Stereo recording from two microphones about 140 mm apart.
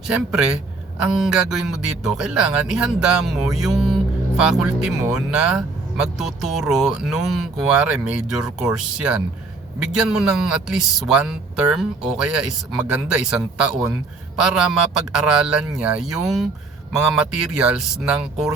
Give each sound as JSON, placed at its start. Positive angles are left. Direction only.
{"t": 1.0, "sound": "a man's voice", "side_deg": 0}